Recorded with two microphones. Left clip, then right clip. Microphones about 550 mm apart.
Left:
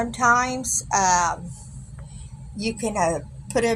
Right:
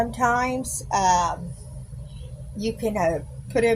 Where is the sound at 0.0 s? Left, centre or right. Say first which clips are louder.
Left 2 dB; right.